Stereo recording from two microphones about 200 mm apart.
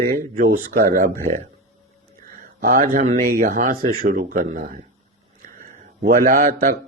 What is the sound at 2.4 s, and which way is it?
Speech, 45° right (ahead or behind).